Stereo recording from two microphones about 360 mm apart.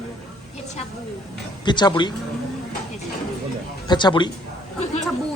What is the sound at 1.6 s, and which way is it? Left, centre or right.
Speech, centre.